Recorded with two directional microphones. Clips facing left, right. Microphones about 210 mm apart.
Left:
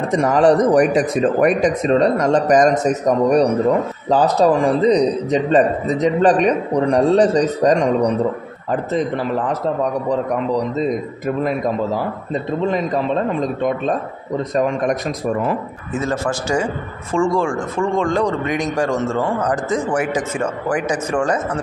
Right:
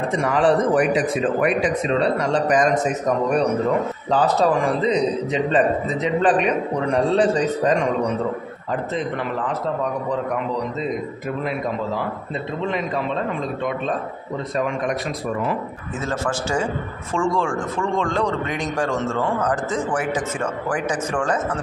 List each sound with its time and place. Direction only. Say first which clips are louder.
0.1 s a man's voice: left 5 dB; 40° left (ahead or behind)
12.7 s a man's voice: left 5 dB; 40° left (ahead or behind)
16.1 s speech: left 2 dB; 10° left (ahead or behind)